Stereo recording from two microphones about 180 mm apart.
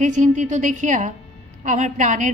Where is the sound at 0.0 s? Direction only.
45° right (ahead or behind).